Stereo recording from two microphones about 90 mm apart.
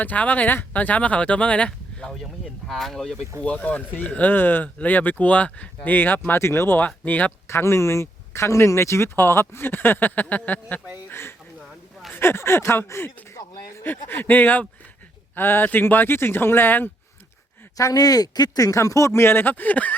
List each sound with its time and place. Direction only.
0.0 s speech: 20° left (ahead or behind); by 3.2 s 5° left (ahead or behind)
3.4 s speech: 15° left (ahead or behind)
11.1 s a sound: 25° left (ahead or behind)
12.1 s speech: 25° left (ahead or behind)
17.7 s speech: 40° left (ahead or behind); by 19.9 s 20° left (ahead or behind)